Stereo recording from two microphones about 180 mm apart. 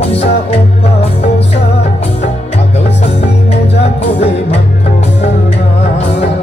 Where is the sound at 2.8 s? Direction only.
35° left (ahead or behind).